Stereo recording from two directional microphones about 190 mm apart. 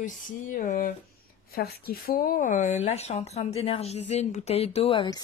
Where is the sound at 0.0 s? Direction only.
45° left (ahead or behind).